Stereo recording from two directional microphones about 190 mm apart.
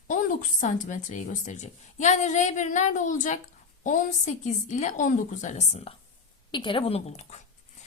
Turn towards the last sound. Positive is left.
turn(degrees=35)  # may be behind; listen again after turning